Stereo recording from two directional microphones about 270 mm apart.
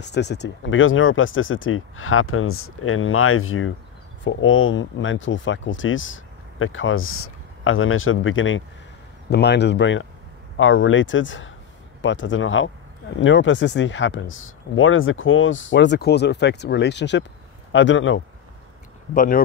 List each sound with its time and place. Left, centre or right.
0.0 s speech: left
19.1 s speech: left